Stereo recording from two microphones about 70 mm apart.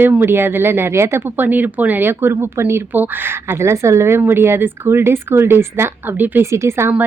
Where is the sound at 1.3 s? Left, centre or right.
Right.